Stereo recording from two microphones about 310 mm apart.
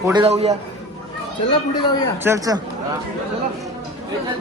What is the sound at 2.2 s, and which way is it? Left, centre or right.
Speech, centre.